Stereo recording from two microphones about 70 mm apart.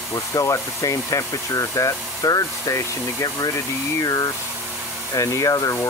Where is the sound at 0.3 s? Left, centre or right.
Left.